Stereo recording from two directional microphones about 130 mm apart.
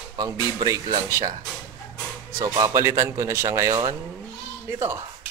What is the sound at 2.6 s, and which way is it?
Speech, 25° right (ahead or behind).